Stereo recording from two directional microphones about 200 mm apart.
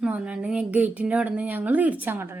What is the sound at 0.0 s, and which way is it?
A woman's voice, 5° right (ahead or behind).